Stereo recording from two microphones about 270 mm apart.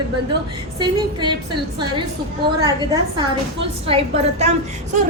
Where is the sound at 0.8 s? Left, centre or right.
Centre.